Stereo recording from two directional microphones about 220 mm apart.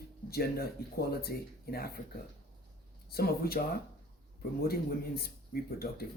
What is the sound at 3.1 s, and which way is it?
Speech, 45° left (ahead or behind).